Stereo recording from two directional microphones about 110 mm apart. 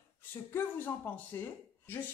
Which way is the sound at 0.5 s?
15° left (ahead or behind).